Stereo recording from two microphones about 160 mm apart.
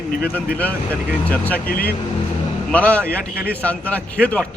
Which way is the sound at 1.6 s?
65° left (ahead or behind).